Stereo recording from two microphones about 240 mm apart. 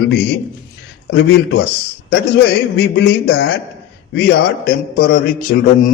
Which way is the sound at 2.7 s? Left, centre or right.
Left.